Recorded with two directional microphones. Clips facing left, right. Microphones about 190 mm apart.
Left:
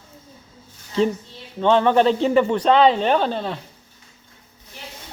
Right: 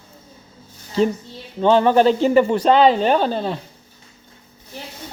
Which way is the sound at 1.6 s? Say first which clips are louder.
Right 2 dB; 5° right (ahead or behind).